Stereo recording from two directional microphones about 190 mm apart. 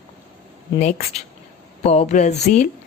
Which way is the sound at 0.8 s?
35° left (ahead or behind).